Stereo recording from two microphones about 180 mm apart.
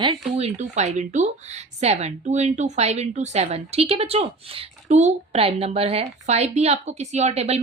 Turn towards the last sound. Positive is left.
turn(degrees=-35)  # may be behind; listen again after turning